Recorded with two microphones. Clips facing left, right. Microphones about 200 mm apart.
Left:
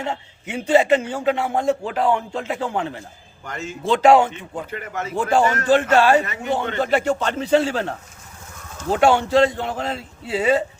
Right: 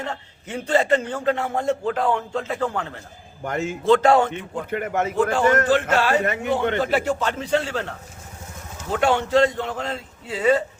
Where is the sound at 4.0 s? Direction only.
10° left (ahead or behind).